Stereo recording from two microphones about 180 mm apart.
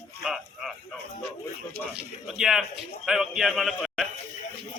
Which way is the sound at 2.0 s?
5° right (ahead or behind).